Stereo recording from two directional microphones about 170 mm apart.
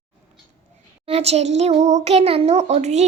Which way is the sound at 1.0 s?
35° right (ahead or behind).